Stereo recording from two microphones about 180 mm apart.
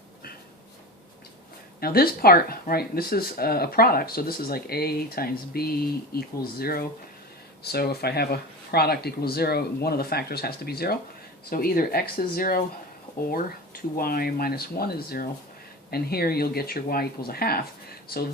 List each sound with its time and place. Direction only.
1.8 s speech: 55° left (ahead or behind)
13.9 s speech: 55° left (ahead or behind)